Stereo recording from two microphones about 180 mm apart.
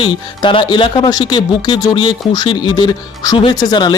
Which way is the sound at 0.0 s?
25° left (ahead or behind).